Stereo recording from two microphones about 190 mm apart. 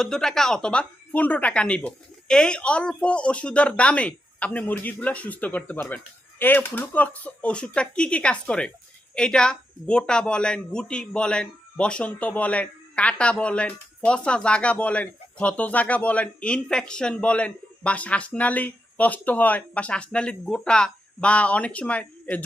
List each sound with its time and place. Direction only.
0.0 s speech: centre (ahead or behind)